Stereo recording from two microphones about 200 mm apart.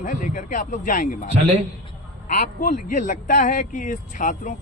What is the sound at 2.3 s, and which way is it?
Speech, 40° left (ahead or behind).